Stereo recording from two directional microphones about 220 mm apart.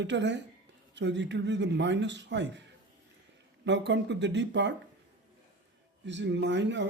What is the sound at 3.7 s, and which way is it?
Speech, 55° right (ahead or behind).